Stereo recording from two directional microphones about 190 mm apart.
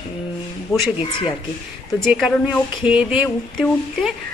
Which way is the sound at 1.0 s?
25° left (ahead or behind).